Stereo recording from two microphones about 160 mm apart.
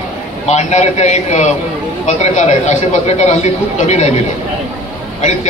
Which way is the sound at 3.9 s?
45° left (ahead or behind).